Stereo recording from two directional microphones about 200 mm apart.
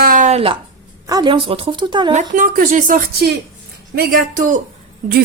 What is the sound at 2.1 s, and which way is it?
A woman's voice, 40° right (ahead or behind).